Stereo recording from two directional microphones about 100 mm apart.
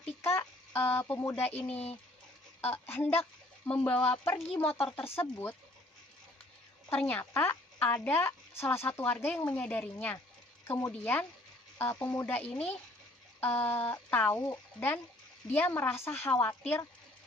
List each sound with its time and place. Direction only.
0.3 s speech: 20° left (ahead or behind)
1.7 s speech: 90° left
2.6 s a woman's voice: 20° left (ahead or behind)
6.9 s a woman's voice: 15° left (ahead or behind)
10.7 s a woman's voice: 25° left (ahead or behind)